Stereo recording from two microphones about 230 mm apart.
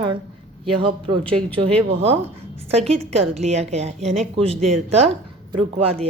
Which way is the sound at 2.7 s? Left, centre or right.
Right.